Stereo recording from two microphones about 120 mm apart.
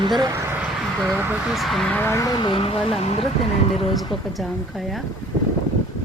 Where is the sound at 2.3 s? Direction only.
40° left (ahead or behind); by 3.2 s 60° left (ahead or behind).